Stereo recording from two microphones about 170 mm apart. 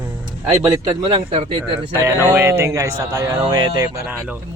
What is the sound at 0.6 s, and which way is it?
Speech, 25° right (ahead or behind).